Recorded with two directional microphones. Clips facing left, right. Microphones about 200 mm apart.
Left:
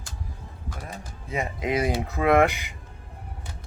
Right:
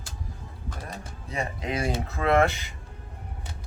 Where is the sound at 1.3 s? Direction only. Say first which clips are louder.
Left 4 dB; 20° left (ahead or behind).